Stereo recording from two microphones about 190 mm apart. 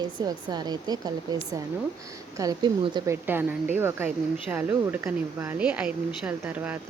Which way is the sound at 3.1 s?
10° right (ahead or behind).